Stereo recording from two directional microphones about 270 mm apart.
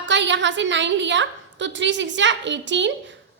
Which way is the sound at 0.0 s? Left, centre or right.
Right.